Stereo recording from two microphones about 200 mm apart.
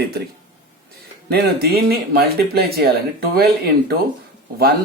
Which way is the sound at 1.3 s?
50° right (ahead or behind).